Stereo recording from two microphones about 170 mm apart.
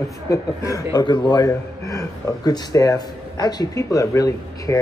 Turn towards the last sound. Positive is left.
turn(degrees=20)  # may be behind; listen again after turning